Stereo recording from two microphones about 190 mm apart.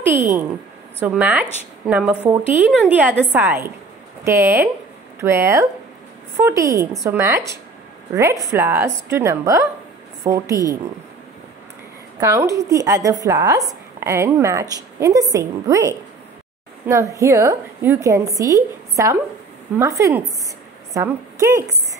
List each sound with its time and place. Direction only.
1.0 s a woman's voice: 5° right (ahead or behind)
12.2 s a woman's voice: 15° right (ahead or behind)